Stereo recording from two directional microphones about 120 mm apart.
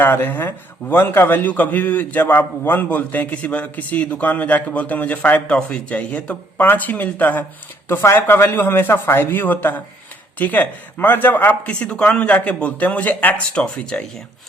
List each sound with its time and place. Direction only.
0.0 s a man's voice: 15° left (ahead or behind)